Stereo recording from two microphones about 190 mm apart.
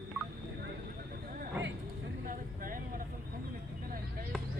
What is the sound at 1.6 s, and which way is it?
Vehicle, 10° right (ahead or behind).